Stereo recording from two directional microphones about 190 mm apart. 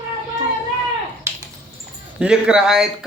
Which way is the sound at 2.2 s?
5° right (ahead or behind).